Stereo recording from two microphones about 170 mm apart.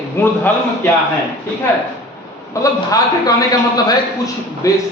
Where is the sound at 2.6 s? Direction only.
20° left (ahead or behind).